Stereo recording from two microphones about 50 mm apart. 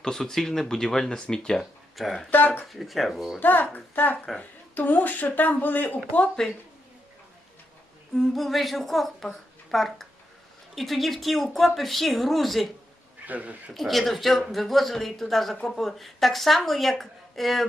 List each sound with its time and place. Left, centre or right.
0.0 s speech: centre
2.0 s a woman's voice: centre
3.4 s speech: left
6.4 s speech: centre
8.1 s a woman's voice: centre
13.2 s speech: right
13.7 s a woman's voice: centre